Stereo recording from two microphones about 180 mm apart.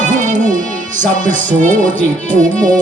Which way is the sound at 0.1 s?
45° right (ahead or behind).